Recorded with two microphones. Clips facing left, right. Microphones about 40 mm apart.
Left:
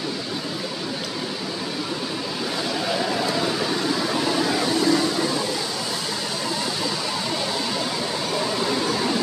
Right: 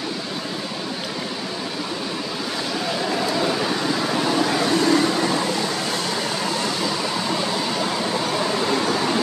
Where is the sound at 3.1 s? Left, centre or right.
Centre.